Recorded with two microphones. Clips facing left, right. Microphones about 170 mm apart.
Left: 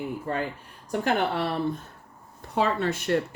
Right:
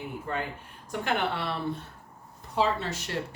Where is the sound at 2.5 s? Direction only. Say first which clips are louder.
Left 3 dB; 55° left (ahead or behind).